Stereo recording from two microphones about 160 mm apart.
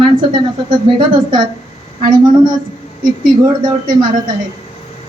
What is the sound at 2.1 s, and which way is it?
Speech, 25° right (ahead or behind).